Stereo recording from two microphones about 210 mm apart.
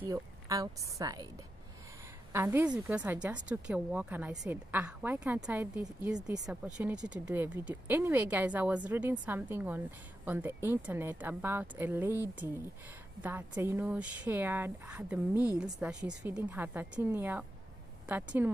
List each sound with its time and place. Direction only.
0.1 s speech: 15° right (ahead or behind)
2.3 s speech: 10° right (ahead or behind)
15.3 s a woman's voice: 15° left (ahead or behind)
15.6 s a woman's voice: 5° right (ahead or behind)